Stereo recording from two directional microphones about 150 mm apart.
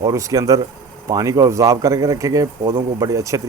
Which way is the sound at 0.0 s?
20° right (ahead or behind).